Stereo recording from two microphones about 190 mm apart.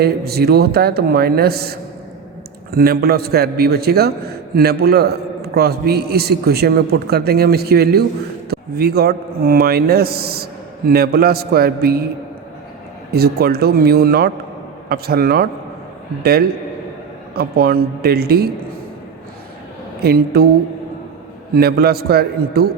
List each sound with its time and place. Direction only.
0.0 s a man's voice: 55° right (ahead or behind)
13.1 s a man's voice: 55° right (ahead or behind)
17.3 s a man's voice: 55° right (ahead or behind)
20.0 s a man's voice: 55° right (ahead or behind)
21.5 s a man's voice: 55° right (ahead or behind)